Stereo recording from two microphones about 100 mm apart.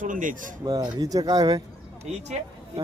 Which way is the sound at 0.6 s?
40° right (ahead or behind).